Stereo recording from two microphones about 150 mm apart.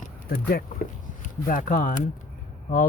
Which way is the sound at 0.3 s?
80° left.